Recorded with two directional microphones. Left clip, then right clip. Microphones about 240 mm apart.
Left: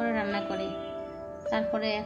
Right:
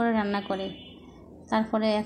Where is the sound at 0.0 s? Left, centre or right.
Centre.